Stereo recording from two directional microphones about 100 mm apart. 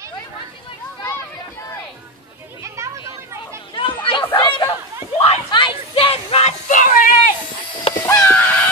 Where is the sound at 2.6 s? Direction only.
30° right (ahead or behind).